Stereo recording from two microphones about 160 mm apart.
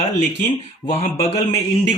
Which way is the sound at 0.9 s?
40° left (ahead or behind).